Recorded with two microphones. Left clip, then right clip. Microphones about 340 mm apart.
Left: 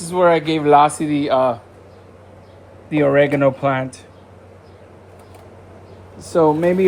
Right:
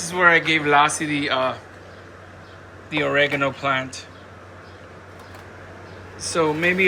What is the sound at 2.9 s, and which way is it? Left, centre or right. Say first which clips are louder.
Speech: left 5 dB; centre.